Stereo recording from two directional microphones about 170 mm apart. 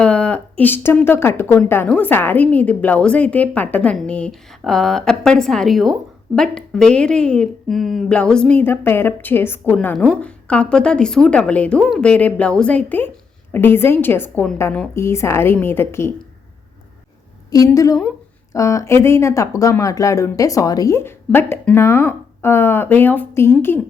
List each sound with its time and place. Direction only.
0.0 s speech: 5° left (ahead or behind)
17.7 s speech: 20° left (ahead or behind)